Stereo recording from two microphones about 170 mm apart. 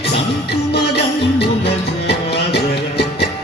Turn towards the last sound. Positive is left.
turn(degrees=75)  # may be behind; listen again after turning